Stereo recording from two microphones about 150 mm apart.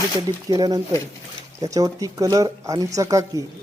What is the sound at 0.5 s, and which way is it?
Speech, 25° right (ahead or behind).